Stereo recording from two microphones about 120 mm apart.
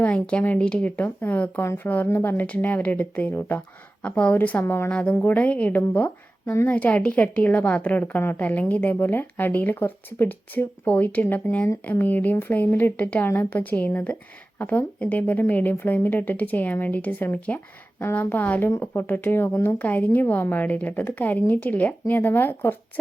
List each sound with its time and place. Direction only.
0.0 s a woman's voice: 10° left (ahead or behind)